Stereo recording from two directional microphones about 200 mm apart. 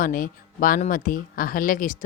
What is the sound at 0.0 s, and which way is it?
Speech, 45° left (ahead or behind).